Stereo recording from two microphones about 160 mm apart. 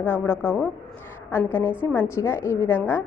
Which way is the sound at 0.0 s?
15° left (ahead or behind).